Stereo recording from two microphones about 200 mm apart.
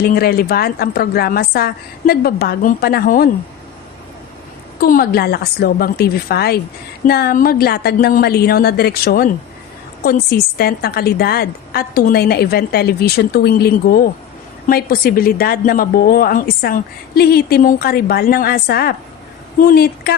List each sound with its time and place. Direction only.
0.0 s a woman's voice: 50° left (ahead or behind)
4.8 s a woman's voice: 50° left (ahead or behind)